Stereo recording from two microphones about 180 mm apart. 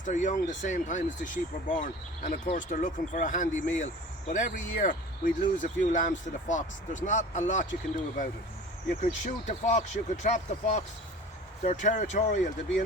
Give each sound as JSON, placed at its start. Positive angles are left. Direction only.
{"t": 0.0, "sound": "speech", "side_deg": 45}
{"t": 9.0, "sound": "speech", "side_deg": 40}